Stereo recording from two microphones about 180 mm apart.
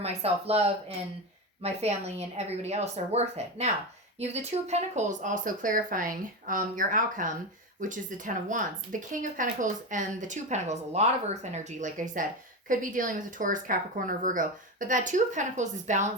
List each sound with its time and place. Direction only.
0.0 s a woman's voice: 35° right (ahead or behind)